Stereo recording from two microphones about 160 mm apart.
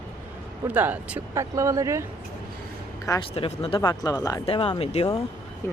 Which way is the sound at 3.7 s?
20° left (ahead or behind).